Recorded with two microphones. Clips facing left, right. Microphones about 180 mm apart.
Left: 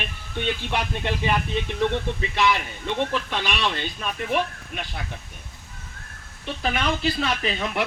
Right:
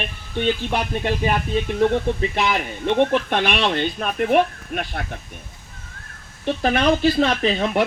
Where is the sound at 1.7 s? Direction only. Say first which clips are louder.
Right 6 dB; 50° right (ahead or behind).